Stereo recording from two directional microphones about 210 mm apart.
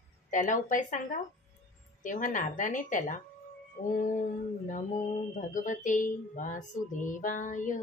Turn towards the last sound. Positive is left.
turn(degrees=40)  # may be behind; listen again after turning